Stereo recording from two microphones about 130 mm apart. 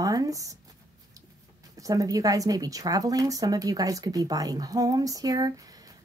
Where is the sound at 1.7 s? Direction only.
25° right (ahead or behind).